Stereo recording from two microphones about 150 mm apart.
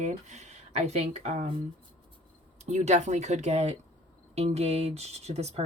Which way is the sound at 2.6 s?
50° right (ahead or behind).